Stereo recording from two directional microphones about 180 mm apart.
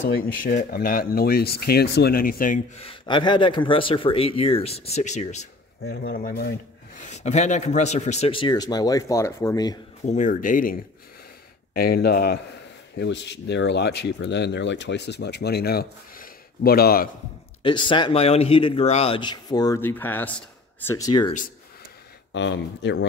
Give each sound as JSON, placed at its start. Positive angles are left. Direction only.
{"t": 0.4, "sound": "speech", "side_deg": 50}
{"t": 2.8, "sound": "speech", "side_deg": 30}
{"t": 5.9, "sound": "speech", "side_deg": 55}
{"t": 7.0, "sound": "a man's voice", "side_deg": 40}
{"t": 10.0, "sound": "speech", "side_deg": 45}
{"t": 12.9, "sound": "speech", "side_deg": 75}
{"t": 17.6, "sound": "a man's voice", "side_deg": 25}
{"t": 21.0, "sound": "a man's voice", "side_deg": 25}
{"t": 22.3, "sound": "speech", "side_deg": 80}